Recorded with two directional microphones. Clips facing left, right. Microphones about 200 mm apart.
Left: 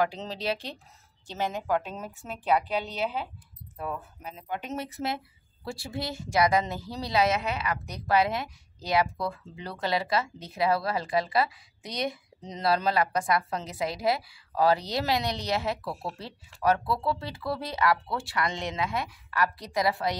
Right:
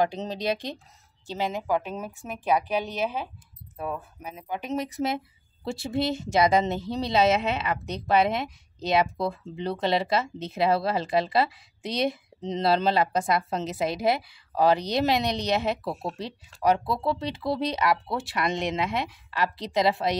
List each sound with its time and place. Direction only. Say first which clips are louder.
0.0 s speech: right 3 dB; 20° right (ahead or behind)